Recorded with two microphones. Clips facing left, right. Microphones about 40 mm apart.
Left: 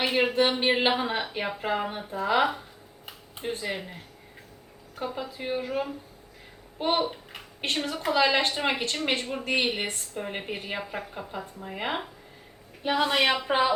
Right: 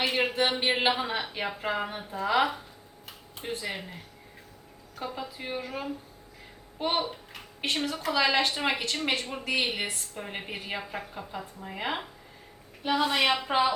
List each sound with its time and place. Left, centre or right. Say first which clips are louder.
0.0 s speech: left 3 dB; centre
3.1 s a sound: left 3 dB; centre
4.9 s a woman's voice: left 3 dB; centre
7.6 s a woman's voice: left 1 dB; centre
12.8 s a woman's voice: left 1 dB; centre